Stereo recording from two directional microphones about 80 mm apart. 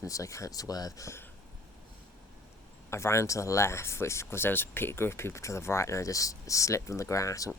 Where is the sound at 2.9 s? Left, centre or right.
Left.